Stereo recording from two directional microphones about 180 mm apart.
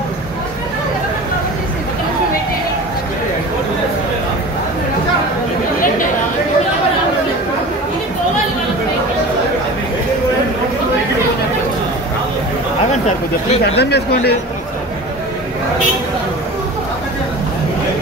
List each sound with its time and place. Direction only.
13.7 s speech: 65° left (ahead or behind)